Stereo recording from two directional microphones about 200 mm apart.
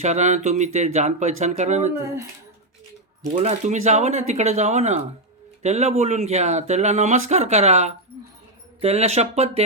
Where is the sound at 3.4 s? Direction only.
35° right (ahead or behind).